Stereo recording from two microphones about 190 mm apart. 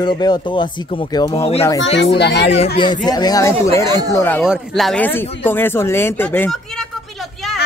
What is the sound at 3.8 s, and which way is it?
Speech, 20° right (ahead or behind).